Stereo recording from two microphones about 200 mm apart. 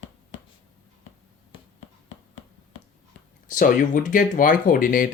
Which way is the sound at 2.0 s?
70° left (ahead or behind).